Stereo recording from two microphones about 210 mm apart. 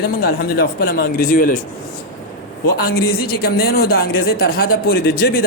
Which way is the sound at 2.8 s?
45° left (ahead or behind).